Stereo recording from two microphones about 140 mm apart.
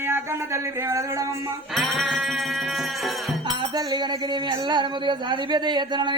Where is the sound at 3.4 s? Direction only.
25° right (ahead or behind).